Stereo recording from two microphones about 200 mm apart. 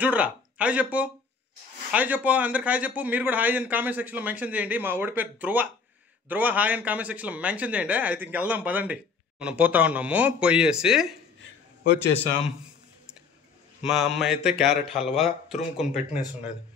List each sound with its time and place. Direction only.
0.0 s a man's voice: 5° right (ahead or behind)
11.8 s a man's voice: 55° left (ahead or behind)
13.8 s speech: centre (ahead or behind)